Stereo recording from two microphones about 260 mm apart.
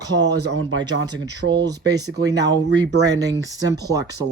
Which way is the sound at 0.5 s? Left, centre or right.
Right.